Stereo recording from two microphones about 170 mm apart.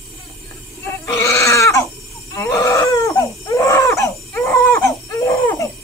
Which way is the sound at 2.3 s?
20° left (ahead or behind).